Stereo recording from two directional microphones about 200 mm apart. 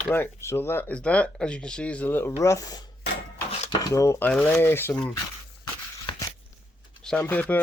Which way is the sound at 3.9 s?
15° left (ahead or behind).